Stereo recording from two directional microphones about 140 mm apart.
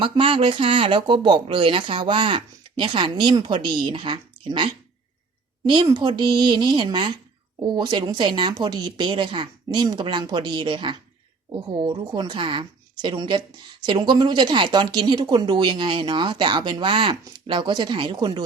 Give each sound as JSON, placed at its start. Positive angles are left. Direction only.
{"t": 0.0, "sound": "a woman's voice", "side_deg": -40}